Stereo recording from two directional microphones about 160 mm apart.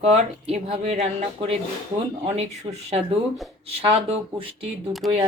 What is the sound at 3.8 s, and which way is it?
Speech, 40° right (ahead or behind).